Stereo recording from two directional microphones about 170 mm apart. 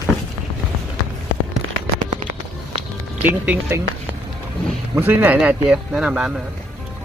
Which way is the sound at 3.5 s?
10° right (ahead or behind).